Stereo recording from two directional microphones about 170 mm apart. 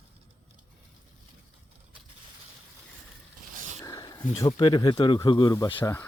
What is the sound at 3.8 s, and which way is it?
Speech, 20° left (ahead or behind).